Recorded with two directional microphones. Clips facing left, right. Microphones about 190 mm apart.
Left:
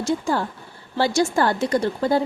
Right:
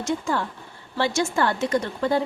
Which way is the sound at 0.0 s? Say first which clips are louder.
Left 3 dB; 35° left (ahead or behind).